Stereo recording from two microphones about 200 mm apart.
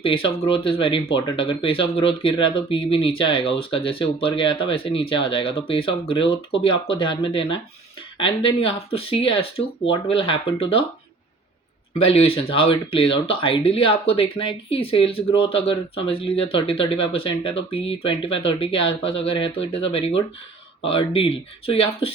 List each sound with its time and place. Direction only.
0.0 s speech: 25° left (ahead or behind)
11.9 s speech: 30° left (ahead or behind)